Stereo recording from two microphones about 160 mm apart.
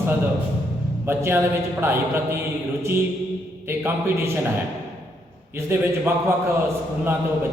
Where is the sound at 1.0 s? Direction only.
15° right (ahead or behind).